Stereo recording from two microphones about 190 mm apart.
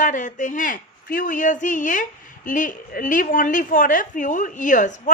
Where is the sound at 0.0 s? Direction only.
40° left (ahead or behind).